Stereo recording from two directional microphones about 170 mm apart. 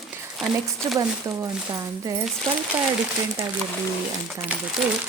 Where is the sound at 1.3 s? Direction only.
20° right (ahead or behind).